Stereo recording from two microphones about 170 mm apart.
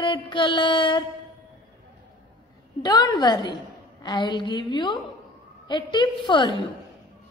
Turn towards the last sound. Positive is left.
turn(degrees=25)  # may be behind; listen again after turning